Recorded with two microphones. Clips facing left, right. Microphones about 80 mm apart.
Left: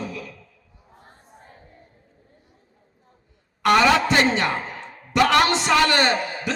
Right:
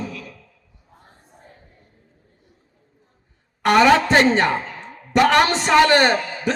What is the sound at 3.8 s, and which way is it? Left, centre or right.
A man's voice, right.